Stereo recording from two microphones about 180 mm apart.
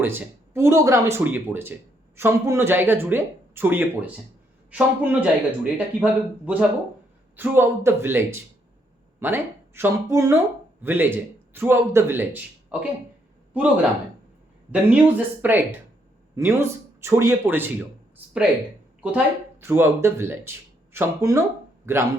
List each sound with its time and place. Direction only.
0.0 s speech: 10° right (ahead or behind)
14.7 s speech: 10° right (ahead or behind)
19.0 s speech: 10° right (ahead or behind)